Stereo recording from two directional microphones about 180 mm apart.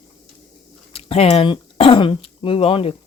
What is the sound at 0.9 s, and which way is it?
Speech, 35° left (ahead or behind).